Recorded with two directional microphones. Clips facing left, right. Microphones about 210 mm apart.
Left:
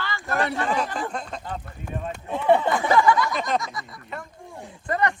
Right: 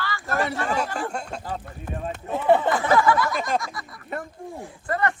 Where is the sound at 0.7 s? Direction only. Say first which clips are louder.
Even; 10° right (ahead or behind).